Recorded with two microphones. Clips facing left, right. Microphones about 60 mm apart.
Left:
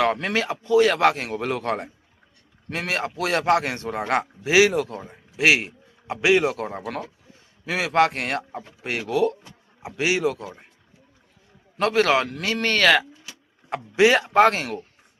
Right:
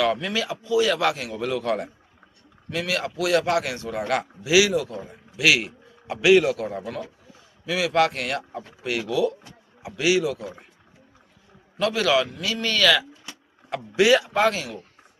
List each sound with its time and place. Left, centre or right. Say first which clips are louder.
0.0 s a man's voice: left 1 dB; left
6.8 s speech: left 1 dB; left
7.6 s a man's voice: left 1 dB; left
11.8 s a man's voice: left 2 dB; left
13.7 s a man's voice: left 1 dB; left